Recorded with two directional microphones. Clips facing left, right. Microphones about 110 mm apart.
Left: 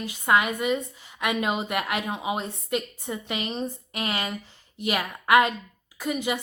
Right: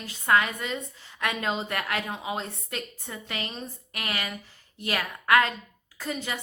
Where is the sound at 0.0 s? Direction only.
15° left (ahead or behind).